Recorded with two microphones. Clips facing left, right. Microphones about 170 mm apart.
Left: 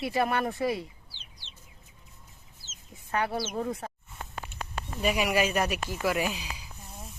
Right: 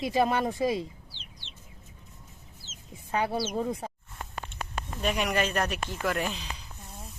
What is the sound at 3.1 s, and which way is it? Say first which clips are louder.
Speech: right 1 dB; 15° right (ahead or behind).